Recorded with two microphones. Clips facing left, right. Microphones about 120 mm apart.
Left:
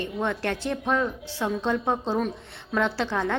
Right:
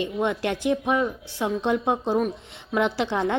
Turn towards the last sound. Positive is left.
turn(degrees=-15)  # may be behind; listen again after turning